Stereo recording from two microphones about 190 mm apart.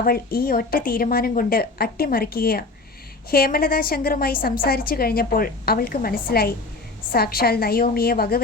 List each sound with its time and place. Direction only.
0.0 s a woman's voice: 50° left (ahead or behind)